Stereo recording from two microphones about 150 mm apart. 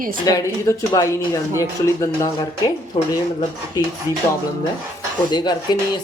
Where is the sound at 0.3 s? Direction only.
25° left (ahead or behind).